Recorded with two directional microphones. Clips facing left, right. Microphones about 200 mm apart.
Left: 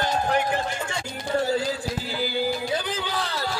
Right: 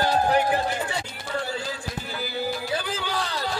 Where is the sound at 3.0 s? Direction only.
15° right (ahead or behind).